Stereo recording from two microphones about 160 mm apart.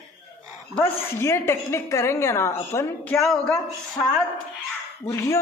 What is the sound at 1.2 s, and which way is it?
A man's voice, 15° left (ahead or behind).